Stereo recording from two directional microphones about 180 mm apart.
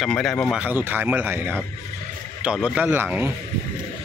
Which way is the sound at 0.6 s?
10° right (ahead or behind).